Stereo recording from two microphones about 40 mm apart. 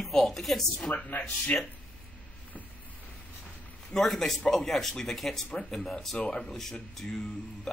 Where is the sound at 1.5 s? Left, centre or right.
Left.